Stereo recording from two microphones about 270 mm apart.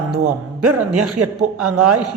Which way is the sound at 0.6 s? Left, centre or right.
Right.